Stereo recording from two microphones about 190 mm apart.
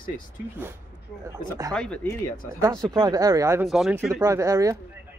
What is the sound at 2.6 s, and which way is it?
Speech, 20° right (ahead or behind).